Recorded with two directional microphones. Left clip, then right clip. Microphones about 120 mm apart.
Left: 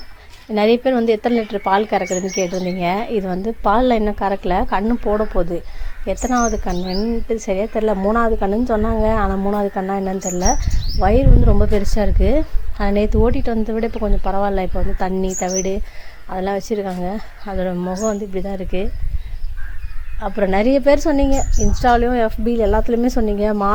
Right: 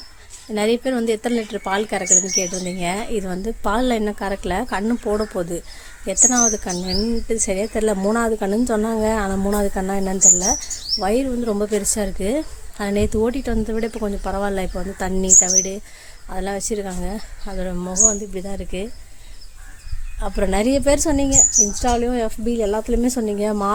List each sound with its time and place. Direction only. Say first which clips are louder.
0.5 s a woman's voice: left 5 dB; 15° right (ahead or behind)
10.2 s a woman's voice: right 3 dB; 20° right (ahead or behind)
20.1 s a woman's voice: left 3 dB; 15° right (ahead or behind)